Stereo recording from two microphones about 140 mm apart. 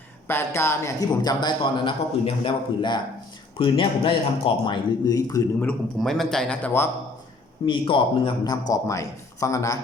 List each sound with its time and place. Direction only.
0.3 s a man's voice: 15° left (ahead or behind)
6.0 s speech: centre (ahead or behind)
7.6 s speech: 35° left (ahead or behind)
8.7 s a man's voice: 25° left (ahead or behind)